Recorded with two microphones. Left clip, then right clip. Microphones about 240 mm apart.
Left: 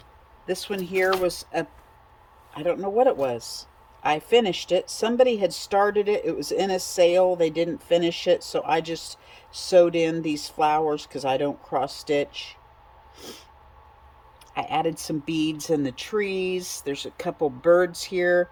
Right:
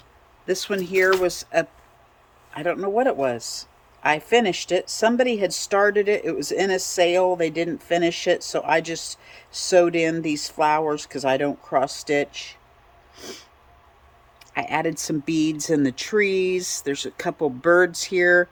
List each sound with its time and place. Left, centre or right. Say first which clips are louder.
0.4 s speech: right 4 dB; centre
13.1 s a sound: right 4 dB; centre
14.5 s speech: right 1 dB; centre